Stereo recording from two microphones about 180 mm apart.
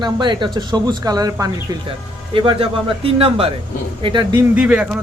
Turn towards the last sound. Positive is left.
turn(degrees=-5)  # may be behind; listen again after turning